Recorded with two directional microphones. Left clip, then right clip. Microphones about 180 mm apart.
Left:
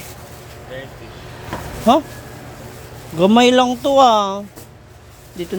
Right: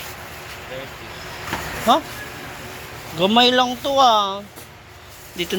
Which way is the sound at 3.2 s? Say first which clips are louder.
Left 3 dB; 45° left (ahead or behind).